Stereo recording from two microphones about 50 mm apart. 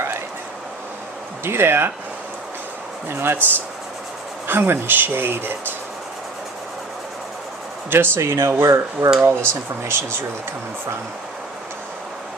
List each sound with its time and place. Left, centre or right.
1.5 s speech: right
3.1 s speech: right
4.4 s speech: right
7.9 s speech: right
9.2 s speech: right